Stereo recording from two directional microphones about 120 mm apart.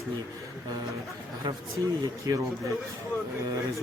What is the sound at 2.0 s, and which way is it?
Speech, 30° right (ahead or behind).